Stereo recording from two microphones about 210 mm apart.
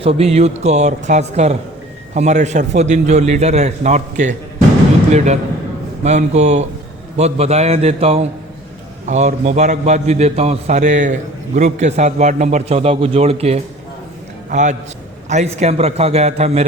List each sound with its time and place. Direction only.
0.0 s a man's voice: 30° right (ahead or behind)